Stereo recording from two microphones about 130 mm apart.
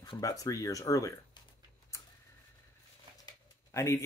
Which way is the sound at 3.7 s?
20° left (ahead or behind).